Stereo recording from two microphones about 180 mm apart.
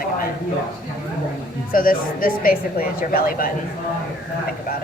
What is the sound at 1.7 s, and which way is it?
A woman's voice, 50° left (ahead or behind).